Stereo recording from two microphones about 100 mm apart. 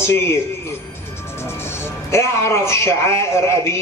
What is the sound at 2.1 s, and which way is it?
A man's voice, 25° left (ahead or behind).